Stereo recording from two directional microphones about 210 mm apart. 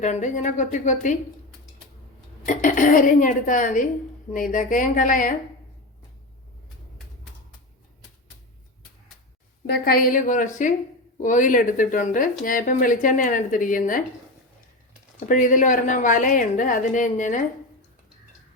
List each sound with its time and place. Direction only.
0.0 s a woman's voice: 35° left (ahead or behind)
2.5 s a woman's voice: 40° left (ahead or behind)
9.6 s a woman's voice: 45° left (ahead or behind)
15.3 s a woman's voice: 40° left (ahead or behind)